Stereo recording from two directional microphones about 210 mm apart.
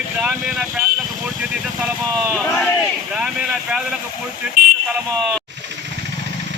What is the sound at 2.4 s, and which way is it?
Speech, 5° left (ahead or behind).